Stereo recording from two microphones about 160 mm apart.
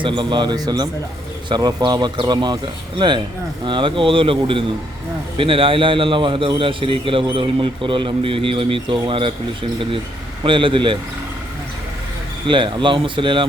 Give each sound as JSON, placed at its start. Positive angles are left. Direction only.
{"t": 0.0, "sound": "speech", "side_deg": -30}
{"t": 3.7, "sound": "a man's voice", "side_deg": -30}
{"t": 10.4, "sound": "a man's voice", "side_deg": -30}
{"t": 12.5, "sound": "a man's voice", "side_deg": -30}